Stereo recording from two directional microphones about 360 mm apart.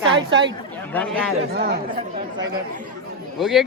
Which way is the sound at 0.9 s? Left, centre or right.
Centre.